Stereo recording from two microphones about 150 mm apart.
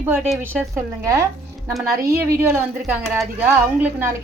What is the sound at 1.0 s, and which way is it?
A woman's voice, 20° right (ahead or behind).